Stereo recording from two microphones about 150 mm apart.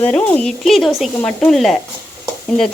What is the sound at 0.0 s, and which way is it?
Speech, 10° left (ahead or behind).